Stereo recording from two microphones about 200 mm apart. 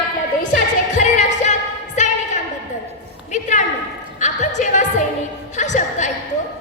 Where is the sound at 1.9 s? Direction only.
35° left (ahead or behind).